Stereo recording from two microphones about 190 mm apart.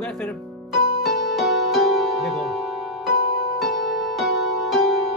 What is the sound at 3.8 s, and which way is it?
Music, centre (ahead or behind).